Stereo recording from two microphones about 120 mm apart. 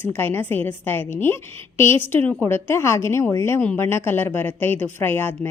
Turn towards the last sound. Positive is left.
turn(degrees=15)  # may be behind; listen again after turning